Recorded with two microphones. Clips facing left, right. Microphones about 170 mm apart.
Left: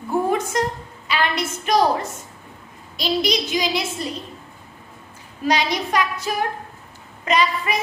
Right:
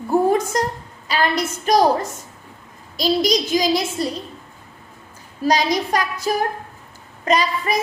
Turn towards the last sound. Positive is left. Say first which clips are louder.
# right 1 dB
turn(degrees=-40)  # may be behind; listen again after turning